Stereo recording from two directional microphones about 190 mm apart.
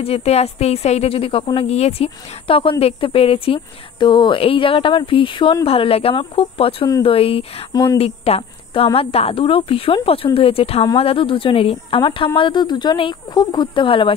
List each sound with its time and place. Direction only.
0.0 s a woman's voice: 30° left (ahead or behind)
7.7 s a woman's voice: 20° left (ahead or behind)
8.0 s a woman's voice: 30° left (ahead or behind)